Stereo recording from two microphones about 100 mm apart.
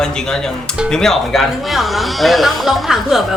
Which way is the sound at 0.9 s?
5° left (ahead or behind).